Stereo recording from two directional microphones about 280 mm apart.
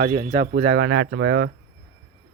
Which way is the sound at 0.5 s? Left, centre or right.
Right.